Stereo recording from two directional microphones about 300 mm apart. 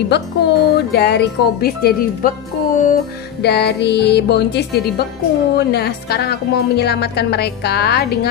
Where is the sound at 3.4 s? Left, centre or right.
Left.